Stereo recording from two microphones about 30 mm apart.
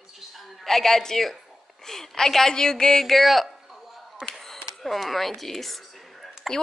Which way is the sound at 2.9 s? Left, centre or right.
Centre.